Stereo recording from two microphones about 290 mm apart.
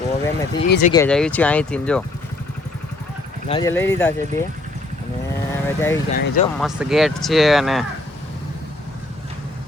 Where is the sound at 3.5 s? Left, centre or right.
Centre.